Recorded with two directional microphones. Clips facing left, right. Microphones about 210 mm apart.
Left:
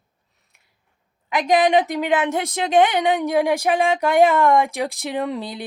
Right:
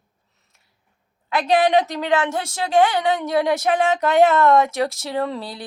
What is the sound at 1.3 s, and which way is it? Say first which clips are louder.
A woman's voice: even; 15° left (ahead or behind).